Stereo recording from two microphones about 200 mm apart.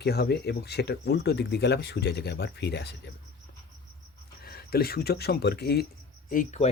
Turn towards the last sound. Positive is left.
turn(degrees=40)  # may be behind; listen again after turning